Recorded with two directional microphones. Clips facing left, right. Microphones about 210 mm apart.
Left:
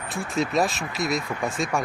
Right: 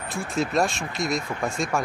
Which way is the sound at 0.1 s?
Centre (ahead or behind).